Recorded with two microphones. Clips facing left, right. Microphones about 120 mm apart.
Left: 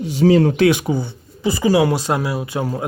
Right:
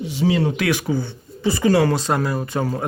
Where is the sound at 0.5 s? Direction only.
25° left (ahead or behind).